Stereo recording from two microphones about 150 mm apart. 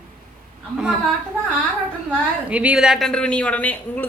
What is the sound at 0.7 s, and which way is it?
Speech, 5° right (ahead or behind).